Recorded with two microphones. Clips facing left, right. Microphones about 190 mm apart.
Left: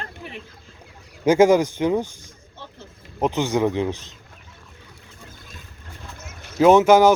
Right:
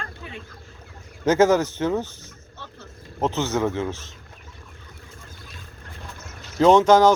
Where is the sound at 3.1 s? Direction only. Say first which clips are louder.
Left 2 dB; 15° left (ahead or behind).